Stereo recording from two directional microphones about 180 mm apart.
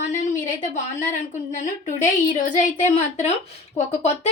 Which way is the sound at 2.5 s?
40° left (ahead or behind).